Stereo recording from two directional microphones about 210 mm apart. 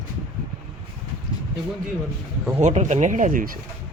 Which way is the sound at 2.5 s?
35° right (ahead or behind).